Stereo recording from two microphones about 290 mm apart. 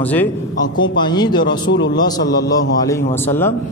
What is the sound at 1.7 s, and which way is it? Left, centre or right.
Speech, left.